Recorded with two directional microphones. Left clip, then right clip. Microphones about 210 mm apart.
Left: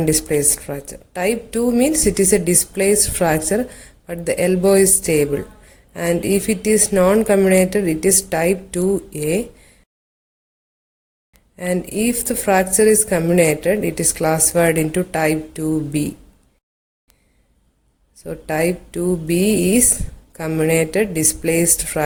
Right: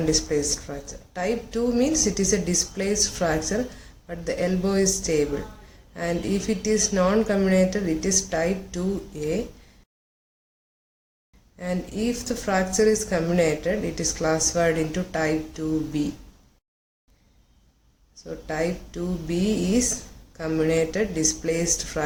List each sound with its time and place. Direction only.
0.0 s a woman's voice: 40° left (ahead or behind)
11.5 s a woman's voice: 45° left (ahead or behind)
18.2 s a woman's voice: 45° left (ahead or behind)